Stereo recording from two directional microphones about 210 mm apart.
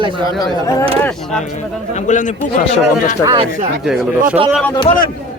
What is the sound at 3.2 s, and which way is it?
Speech, 20° right (ahead or behind).